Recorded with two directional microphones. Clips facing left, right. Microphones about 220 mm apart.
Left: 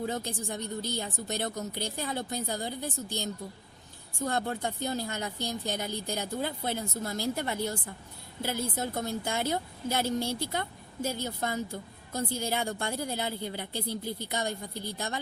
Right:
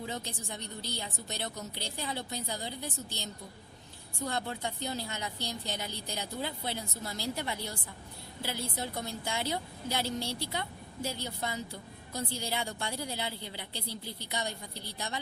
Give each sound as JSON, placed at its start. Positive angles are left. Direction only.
{"t": 0.0, "sound": "a woman's voice", "side_deg": 50}